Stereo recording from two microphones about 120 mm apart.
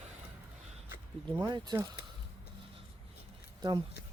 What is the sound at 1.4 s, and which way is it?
Speech, 35° right (ahead or behind).